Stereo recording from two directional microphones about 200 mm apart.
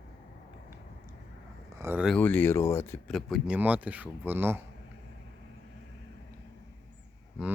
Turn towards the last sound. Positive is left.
turn(degrees=-5)  # may be behind; listen again after turning